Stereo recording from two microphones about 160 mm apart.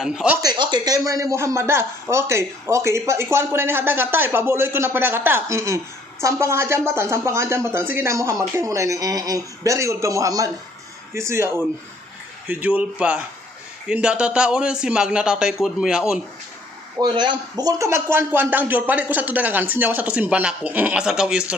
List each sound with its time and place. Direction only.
0.0 s speech: 5° right (ahead or behind)
0.4 s a woman's voice: 25° right (ahead or behind); by 16.2 s 5° right (ahead or behind)
17.0 s a woman's voice: 30° right (ahead or behind); by 21.5 s 5° right (ahead or behind)